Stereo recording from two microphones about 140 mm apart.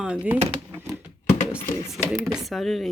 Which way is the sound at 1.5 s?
15° left (ahead or behind).